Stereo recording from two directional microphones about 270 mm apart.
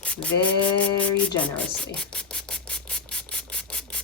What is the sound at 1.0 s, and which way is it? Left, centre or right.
Scratch, centre.